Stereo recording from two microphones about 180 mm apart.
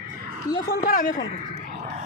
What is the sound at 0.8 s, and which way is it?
Speech, 50° left (ahead or behind).